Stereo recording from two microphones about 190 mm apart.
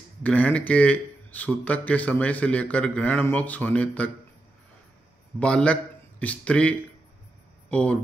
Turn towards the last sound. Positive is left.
turn(degrees=5)  # may be behind; listen again after turning